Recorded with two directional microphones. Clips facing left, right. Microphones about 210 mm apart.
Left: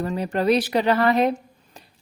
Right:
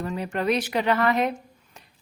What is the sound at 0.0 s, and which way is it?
Speech, 35° left (ahead or behind).